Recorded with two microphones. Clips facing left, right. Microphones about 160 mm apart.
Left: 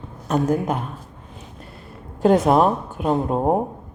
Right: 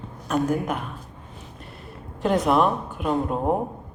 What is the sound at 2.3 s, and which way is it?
Speech, 40° left (ahead or behind).